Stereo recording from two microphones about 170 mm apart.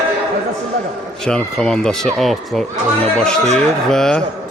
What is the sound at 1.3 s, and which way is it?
Speech, 5° left (ahead or behind).